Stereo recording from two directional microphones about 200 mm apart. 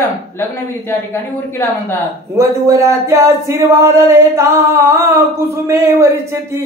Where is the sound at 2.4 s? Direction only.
15° right (ahead or behind).